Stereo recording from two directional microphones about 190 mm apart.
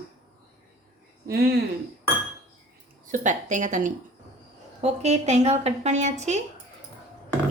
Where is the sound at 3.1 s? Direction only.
40° right (ahead or behind).